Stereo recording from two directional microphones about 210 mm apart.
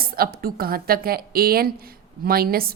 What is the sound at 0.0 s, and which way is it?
A woman's voice, 45° right (ahead or behind).